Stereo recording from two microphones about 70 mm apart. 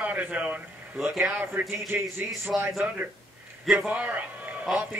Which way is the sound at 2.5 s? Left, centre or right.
Centre.